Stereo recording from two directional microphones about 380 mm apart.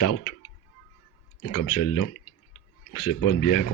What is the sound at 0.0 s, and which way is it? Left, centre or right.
Speech, left.